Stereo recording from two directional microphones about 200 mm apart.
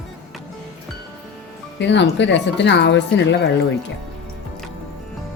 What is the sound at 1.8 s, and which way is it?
Speech, 60° left (ahead or behind).